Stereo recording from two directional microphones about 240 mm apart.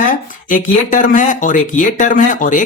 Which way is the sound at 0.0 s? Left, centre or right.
Left.